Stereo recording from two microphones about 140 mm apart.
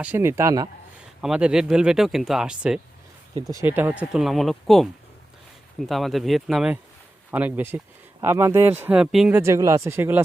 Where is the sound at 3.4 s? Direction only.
20° right (ahead or behind).